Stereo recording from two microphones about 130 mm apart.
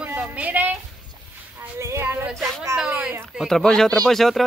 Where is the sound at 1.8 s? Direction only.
20° right (ahead or behind).